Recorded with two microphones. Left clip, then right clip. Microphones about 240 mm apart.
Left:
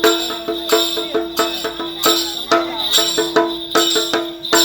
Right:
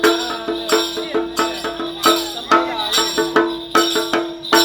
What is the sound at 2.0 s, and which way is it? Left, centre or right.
Music, right.